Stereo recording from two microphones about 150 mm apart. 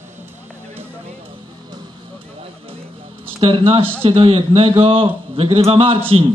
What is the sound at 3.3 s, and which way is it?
A man's voice, 35° right (ahead or behind).